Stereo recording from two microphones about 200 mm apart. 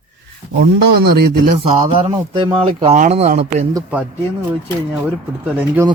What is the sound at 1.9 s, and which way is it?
Speech, 25° right (ahead or behind).